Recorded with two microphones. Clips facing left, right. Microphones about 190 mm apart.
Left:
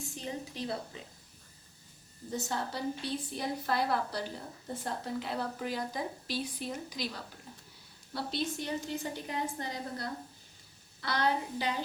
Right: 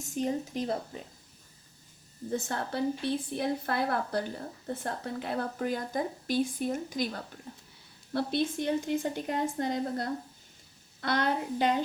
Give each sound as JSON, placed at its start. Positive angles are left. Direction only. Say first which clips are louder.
{"t": 0.0, "sound": "speech", "louder": "right 8 dB", "side_deg": -45}
{"t": 2.3, "sound": "a woman's voice", "louder": "right 3 dB", "side_deg": -55}